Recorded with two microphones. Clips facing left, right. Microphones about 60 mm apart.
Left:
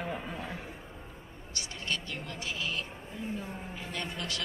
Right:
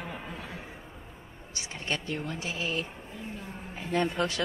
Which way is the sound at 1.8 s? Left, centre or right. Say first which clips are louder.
Right 4 dB; right.